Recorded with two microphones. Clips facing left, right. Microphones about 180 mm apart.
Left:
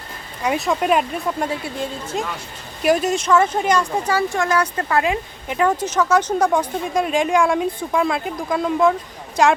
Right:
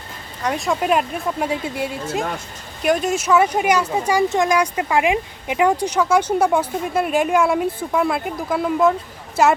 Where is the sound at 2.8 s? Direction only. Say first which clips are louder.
Left 1 dB; centre (ahead or behind).